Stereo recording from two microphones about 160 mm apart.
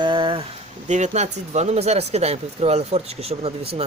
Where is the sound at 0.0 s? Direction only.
30° right (ahead or behind).